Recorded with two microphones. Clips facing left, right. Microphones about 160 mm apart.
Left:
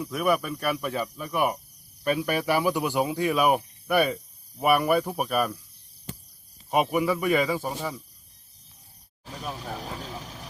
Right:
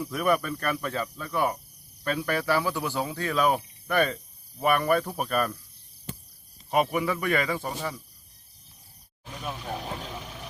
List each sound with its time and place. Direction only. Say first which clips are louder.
0.0 s cricket: even; 5° left (ahead or behind)
6.7 s cricket: left 2 dB; 10° left (ahead or behind)
9.2 s a sound: left 1 dB; 35° left (ahead or behind)
9.7 s vehicle: right 1 dB; 35° left (ahead or behind)